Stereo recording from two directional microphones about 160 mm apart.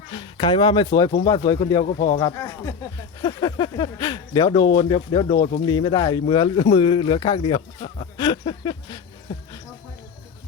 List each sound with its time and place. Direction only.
0.1 s speech: 30° left (ahead or behind)